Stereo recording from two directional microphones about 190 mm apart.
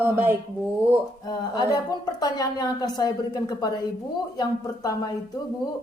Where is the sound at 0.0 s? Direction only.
10° right (ahead or behind).